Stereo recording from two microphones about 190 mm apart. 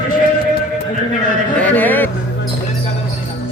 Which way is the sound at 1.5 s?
10° left (ahead or behind).